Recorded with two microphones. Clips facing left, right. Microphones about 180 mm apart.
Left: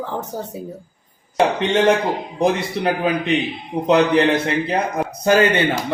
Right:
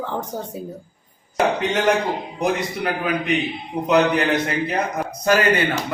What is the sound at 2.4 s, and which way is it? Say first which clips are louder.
A man's voice: left 4 dB; 30° left (ahead or behind).